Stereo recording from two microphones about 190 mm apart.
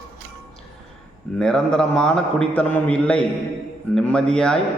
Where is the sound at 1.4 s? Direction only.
5° left (ahead or behind).